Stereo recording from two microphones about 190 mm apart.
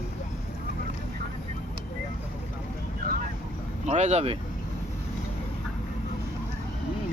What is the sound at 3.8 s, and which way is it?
Speech, 35° right (ahead or behind).